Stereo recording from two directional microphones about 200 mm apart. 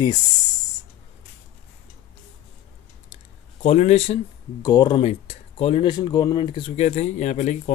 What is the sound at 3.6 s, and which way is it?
Speech, 35° left (ahead or behind).